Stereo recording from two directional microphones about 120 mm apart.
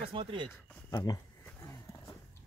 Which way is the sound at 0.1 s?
45° right (ahead or behind).